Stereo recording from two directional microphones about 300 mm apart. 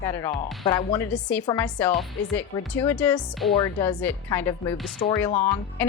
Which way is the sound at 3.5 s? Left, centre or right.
Centre.